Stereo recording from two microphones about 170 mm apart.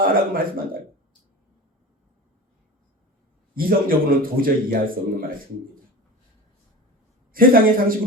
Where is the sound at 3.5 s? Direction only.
55° right (ahead or behind).